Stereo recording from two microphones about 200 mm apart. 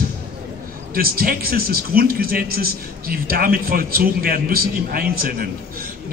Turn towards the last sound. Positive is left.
turn(degrees=-45)  # may be behind; listen again after turning